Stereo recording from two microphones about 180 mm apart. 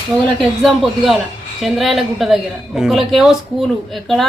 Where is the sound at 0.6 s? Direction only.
Centre (ahead or behind).